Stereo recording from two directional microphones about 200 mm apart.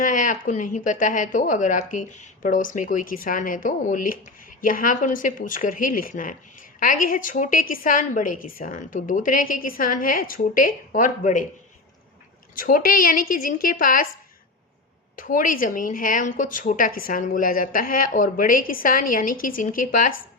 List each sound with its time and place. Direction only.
0.0 s a woman's voice: 40° left (ahead or behind)
12.5 s a woman's voice: 45° left (ahead or behind)
15.1 s a woman's voice: 40° left (ahead or behind)